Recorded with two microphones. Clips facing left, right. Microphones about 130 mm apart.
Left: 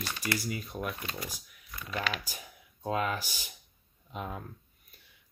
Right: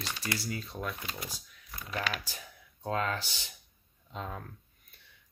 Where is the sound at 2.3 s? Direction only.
15° left (ahead or behind).